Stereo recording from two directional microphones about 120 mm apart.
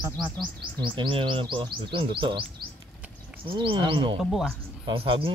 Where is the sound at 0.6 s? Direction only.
40° right (ahead or behind).